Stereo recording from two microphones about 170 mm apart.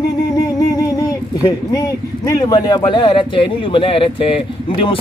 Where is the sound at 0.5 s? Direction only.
20° left (ahead or behind).